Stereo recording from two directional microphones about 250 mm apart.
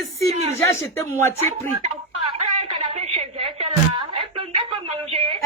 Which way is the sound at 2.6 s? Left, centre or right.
Right.